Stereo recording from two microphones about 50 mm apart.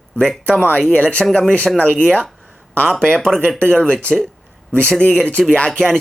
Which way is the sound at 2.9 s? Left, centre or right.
Centre.